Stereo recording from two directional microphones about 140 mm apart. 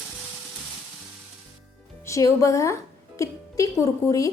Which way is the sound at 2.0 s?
20° left (ahead or behind).